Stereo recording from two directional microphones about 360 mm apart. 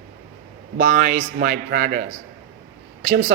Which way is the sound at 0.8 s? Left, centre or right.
Right.